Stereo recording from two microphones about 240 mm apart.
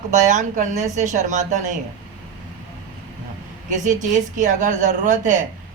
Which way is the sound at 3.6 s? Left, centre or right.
Right.